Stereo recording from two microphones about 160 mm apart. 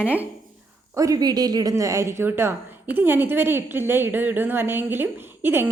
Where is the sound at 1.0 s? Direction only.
25° right (ahead or behind).